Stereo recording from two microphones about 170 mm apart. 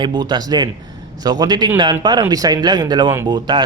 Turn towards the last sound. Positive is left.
turn(degrees=-25)  # may be behind; listen again after turning